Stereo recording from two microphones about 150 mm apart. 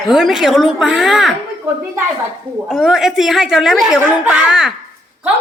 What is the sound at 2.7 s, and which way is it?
Speech, centre (ahead or behind).